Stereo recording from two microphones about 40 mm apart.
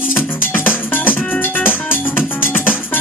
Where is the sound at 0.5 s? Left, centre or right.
Left.